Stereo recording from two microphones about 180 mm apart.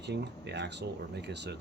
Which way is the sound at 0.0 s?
70° right (ahead or behind).